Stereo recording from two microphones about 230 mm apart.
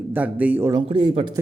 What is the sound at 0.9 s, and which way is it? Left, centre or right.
Speech, right.